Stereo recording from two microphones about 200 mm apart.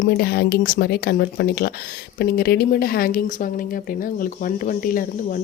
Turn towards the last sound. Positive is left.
turn(degrees=45)  # may be behind; listen again after turning